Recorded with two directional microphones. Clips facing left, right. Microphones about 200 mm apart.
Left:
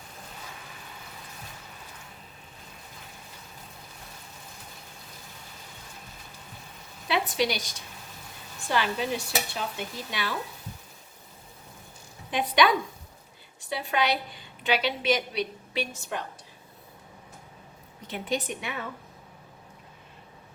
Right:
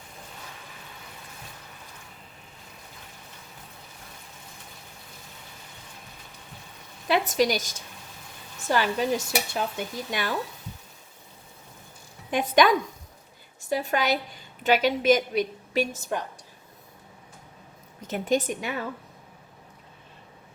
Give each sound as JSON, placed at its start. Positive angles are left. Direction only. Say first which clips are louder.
{"t": 7.1, "sound": "a woman's voice", "louder": "right 4 dB", "side_deg": -45}
{"t": 12.3, "sound": "a woman's voice", "louder": "right 3 dB", "side_deg": -45}
{"t": 18.1, "sound": "a woman's voice", "louder": "right 6 dB", "side_deg": -45}